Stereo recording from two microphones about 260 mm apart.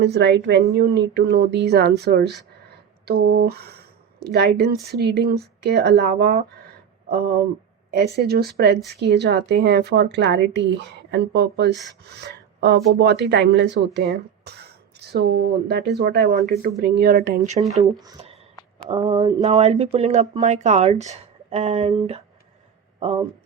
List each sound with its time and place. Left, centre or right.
0.0 s speech: right
7.9 s speech: right
18.0 s speech: centre